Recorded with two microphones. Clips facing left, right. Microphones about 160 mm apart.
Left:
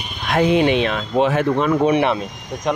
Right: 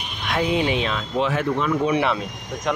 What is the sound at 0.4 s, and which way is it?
Speech, 65° left (ahead or behind).